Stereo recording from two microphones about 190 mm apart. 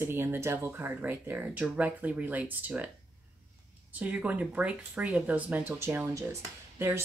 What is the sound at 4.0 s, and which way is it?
Speech, 10° right (ahead or behind).